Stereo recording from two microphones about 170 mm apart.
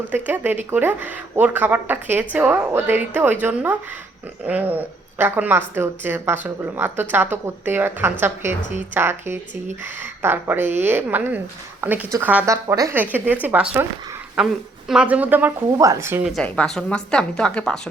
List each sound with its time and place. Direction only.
0.1 s a woman's voice: 10° right (ahead or behind)
12.6 s a woman's voice: 20° right (ahead or behind)
16.3 s a woman's voice: 5° left (ahead or behind)